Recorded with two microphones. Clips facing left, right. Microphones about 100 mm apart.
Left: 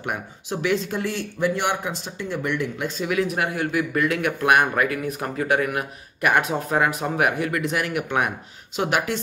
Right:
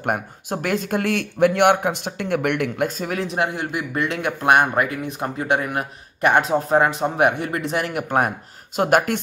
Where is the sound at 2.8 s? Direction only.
45° right (ahead or behind).